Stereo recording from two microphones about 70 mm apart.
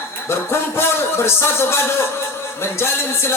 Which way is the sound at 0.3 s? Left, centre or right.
Left.